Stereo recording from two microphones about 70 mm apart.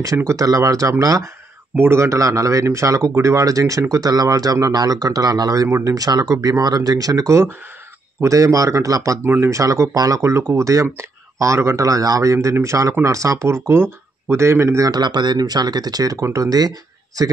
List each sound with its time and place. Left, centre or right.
0.0 s a man's voice: right
1.8 s a man's voice: right
4.7 s speech: right
5.7 s speech: right
5.9 s a man's voice: right
9.2 s speech: right
9.5 s a man's voice: right
14.9 s speech: right